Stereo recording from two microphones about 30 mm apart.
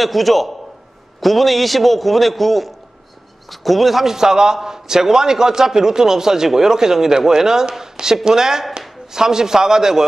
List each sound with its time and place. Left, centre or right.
0.0 s a man's voice: centre
4.0 s a man's voice: centre